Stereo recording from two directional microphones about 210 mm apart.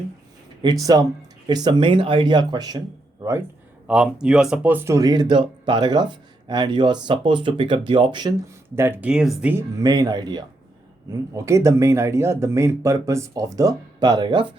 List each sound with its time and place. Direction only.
0.6 s speech: 20° right (ahead or behind)
3.8 s speech: 5° right (ahead or behind); by 14.4 s 20° right (ahead or behind)